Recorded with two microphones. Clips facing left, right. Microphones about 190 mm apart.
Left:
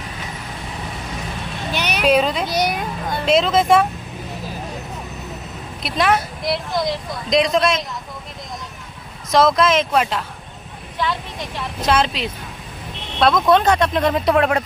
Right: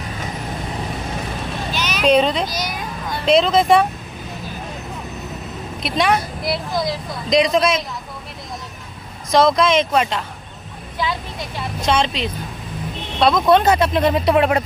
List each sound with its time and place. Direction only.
1.7 s vehicle: 60° left (ahead or behind)
2.0 s a woman's voice: 5° left (ahead or behind)
2.5 s a sound: 65° left (ahead or behind)
3.3 s a woman's voice: centre (ahead or behind)
5.8 s a woman's voice: centre (ahead or behind)
9.3 s a woman's voice: centre (ahead or behind)
11.0 s a woman's voice: 10° right (ahead or behind)
11.8 s a woman's voice: 5° left (ahead or behind)